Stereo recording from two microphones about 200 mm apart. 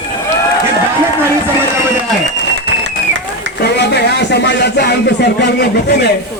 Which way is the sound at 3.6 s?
55° left (ahead or behind).